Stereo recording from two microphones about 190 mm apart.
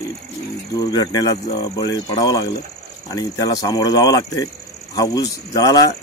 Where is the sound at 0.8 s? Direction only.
20° left (ahead or behind).